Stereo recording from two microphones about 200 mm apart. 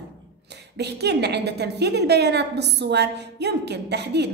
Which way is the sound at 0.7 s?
55° right (ahead or behind).